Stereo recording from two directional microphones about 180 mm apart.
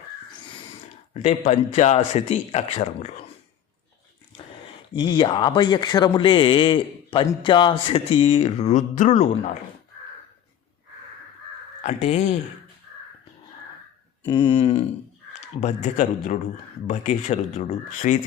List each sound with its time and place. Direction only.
0.3 s crow: 25° left (ahead or behind)
1.1 s speech: 35° left (ahead or behind)
4.9 s a man's voice: 25° left (ahead or behind); by 9.2 s 40° left (ahead or behind)
11.8 s speech: 40° left (ahead or behind)
14.3 s speech: 30° left (ahead or behind)